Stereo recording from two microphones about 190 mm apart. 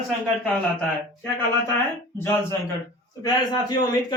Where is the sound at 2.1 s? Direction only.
10° left (ahead or behind).